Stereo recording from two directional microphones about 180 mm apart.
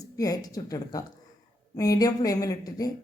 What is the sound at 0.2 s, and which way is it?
A woman's voice, 20° left (ahead or behind).